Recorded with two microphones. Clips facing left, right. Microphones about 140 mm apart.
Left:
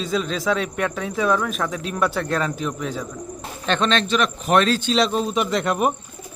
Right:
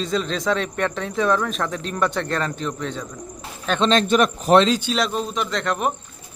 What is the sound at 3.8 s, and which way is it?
Speech, 40° right (ahead or behind).